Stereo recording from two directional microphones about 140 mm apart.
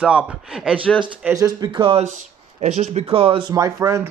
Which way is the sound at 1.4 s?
30° right (ahead or behind).